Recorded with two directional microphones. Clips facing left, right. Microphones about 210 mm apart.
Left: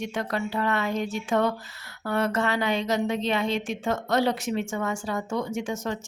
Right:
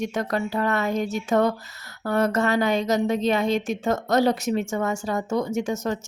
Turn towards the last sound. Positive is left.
turn(degrees=-40)  # may be behind; listen again after turning